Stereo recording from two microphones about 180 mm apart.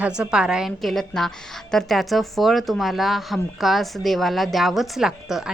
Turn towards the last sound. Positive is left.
turn(degrees=-5)  # may be behind; listen again after turning